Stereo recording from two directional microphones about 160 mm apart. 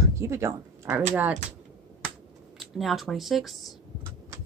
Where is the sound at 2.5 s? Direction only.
Centre (ahead or behind).